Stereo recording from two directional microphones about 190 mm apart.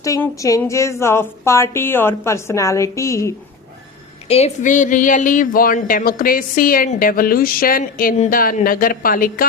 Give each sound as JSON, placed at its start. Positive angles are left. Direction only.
{"t": 0.0, "sound": "speech", "side_deg": 15}
{"t": 4.3, "sound": "speech", "side_deg": 35}